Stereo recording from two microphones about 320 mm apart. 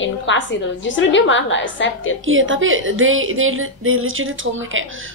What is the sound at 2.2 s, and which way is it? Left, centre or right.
A woman's voice, right.